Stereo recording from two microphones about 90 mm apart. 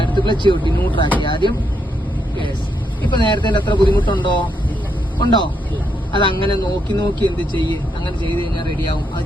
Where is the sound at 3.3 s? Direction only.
60° left (ahead or behind).